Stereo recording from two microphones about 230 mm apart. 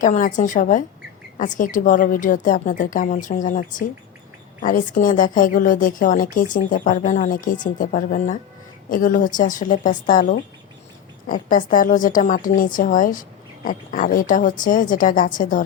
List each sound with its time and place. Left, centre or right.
0.0 s a woman's voice: left